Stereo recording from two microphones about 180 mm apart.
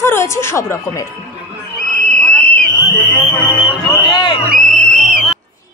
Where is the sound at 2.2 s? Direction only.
55° left (ahead or behind).